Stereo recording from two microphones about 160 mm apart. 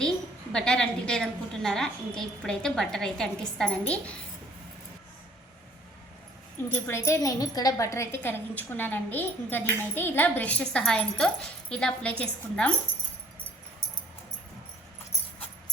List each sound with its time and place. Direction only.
0.5 s a woman's voice: 5° left (ahead or behind)
6.7 s a woman's voice: 15° left (ahead or behind)